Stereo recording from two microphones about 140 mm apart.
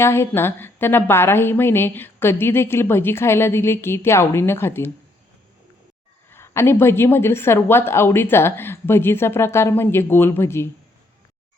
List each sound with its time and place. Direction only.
0.0 s a woman's voice: 15° left (ahead or behind)
6.3 s a woman's voice: 20° left (ahead or behind)